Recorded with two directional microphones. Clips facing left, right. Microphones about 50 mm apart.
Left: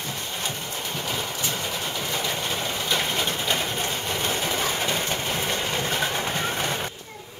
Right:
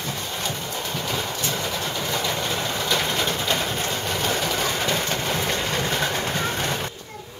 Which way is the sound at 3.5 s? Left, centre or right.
Right.